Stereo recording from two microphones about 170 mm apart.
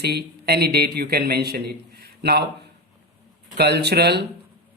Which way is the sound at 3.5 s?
80° right.